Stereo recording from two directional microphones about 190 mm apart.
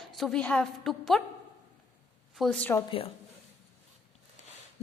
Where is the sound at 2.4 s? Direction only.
5° left (ahead or behind).